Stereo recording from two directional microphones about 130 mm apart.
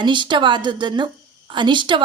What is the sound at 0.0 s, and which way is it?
A woman's voice, 35° right (ahead or behind).